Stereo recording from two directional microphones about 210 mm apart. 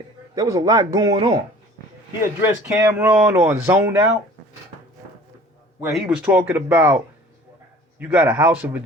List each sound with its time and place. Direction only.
0.3 s speech: 15° right (ahead or behind)
2.4 s speech: 10° right (ahead or behind)
5.8 s speech: 10° right (ahead or behind)
8.0 s speech: 10° right (ahead or behind)